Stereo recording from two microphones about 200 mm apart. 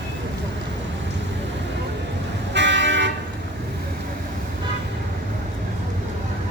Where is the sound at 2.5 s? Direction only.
65° right (ahead or behind).